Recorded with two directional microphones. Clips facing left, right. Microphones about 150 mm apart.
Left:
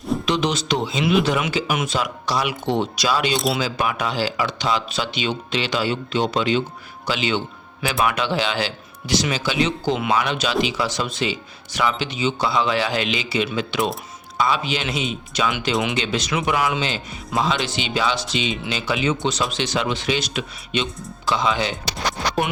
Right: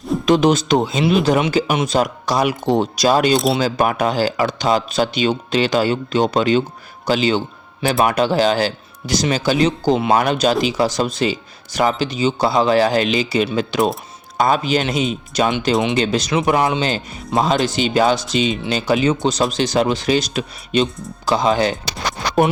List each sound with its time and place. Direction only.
0.3 s a man's voice: 45° right (ahead or behind)